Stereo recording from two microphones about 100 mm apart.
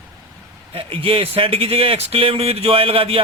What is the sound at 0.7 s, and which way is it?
A man's voice, 65° right (ahead or behind).